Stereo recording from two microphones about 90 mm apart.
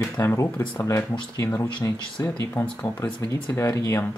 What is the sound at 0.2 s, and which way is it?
Speech, 25° left (ahead or behind).